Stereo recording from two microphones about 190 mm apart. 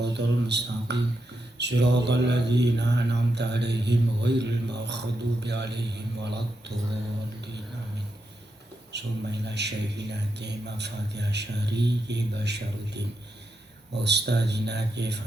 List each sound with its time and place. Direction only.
0.0 s a sound: 65° right (ahead or behind)
1.5 s mantra: 65° right (ahead or behind)
8.9 s mantra: 65° right (ahead or behind)